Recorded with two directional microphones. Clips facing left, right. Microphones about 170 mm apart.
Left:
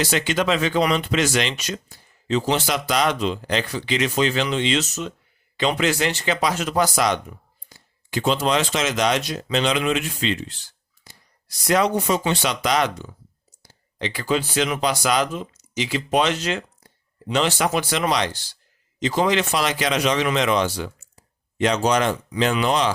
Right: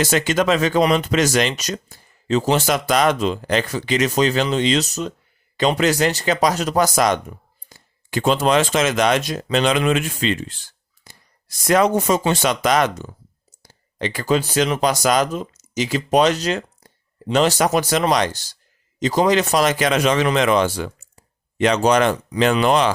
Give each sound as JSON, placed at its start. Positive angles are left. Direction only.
{"t": 0.0, "sound": "speech", "side_deg": -45}
{"t": 11.0, "sound": "shuffling cards", "side_deg": -50}
{"t": 12.3, "sound": "speech", "side_deg": -45}